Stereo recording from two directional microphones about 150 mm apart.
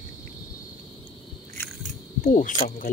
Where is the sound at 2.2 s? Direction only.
60° left (ahead or behind).